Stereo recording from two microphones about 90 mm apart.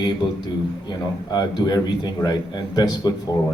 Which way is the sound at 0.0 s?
50° left (ahead or behind).